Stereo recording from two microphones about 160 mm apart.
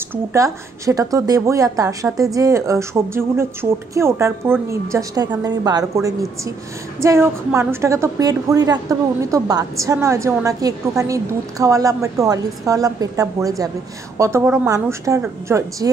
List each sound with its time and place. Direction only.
0.1 s a woman's voice: 20° right (ahead or behind)